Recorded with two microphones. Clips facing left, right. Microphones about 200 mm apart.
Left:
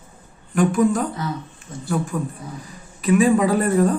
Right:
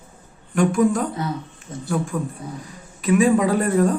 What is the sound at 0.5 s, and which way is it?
Speech, centre (ahead or behind).